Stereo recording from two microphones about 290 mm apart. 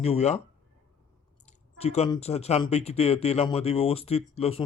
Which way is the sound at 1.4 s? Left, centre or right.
Left.